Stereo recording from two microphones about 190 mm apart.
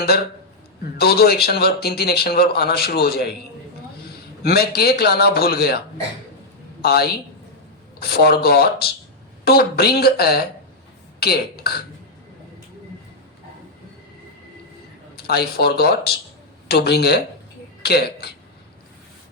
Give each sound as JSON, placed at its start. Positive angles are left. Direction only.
{"t": 0.9, "sound": "a man's voice", "side_deg": 55}
{"t": 6.8, "sound": "speech", "side_deg": 55}
{"t": 8.1, "sound": "speech", "side_deg": 55}
{"t": 15.1, "sound": "speech", "side_deg": 55}